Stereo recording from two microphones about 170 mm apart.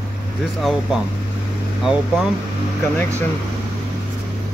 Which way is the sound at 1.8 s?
5° right (ahead or behind).